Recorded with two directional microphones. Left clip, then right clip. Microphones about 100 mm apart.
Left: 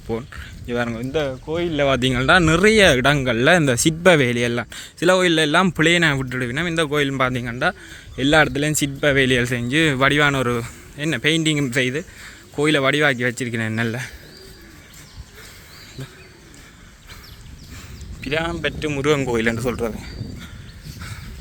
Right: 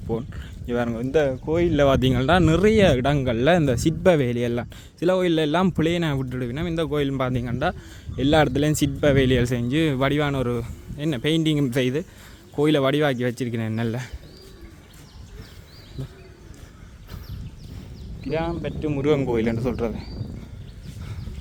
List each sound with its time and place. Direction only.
0.3 s speech: 30° right (ahead or behind)
2.0 s speech: 30° right (ahead or behind); by 5.4 s 10° right (ahead or behind)
5.4 s speech: 20° right (ahead or behind)
5.8 s speech: 5° right (ahead or behind); by 8.2 s 25° right (ahead or behind)
8.4 s speech: 35° right (ahead or behind)
9.7 s speech: 15° right (ahead or behind)
10.9 s speech: 25° right (ahead or behind)
11.7 s speech: 45° right (ahead or behind)
12.5 s speech: 35° right (ahead or behind)
13.6 s speech: 15° right (ahead or behind)
18.2 s a man's voice: 5° left (ahead or behind)
19.0 s speech: 15° right (ahead or behind)